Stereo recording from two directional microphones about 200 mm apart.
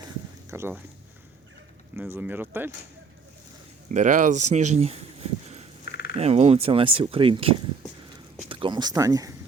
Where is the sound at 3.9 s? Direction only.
40° right (ahead or behind); by 9.3 s 15° right (ahead or behind).